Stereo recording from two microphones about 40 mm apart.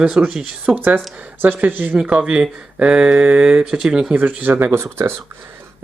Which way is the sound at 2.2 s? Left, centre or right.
Centre.